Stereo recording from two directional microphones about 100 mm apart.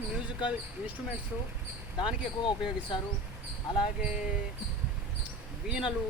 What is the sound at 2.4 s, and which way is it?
Speech, 50° left (ahead or behind).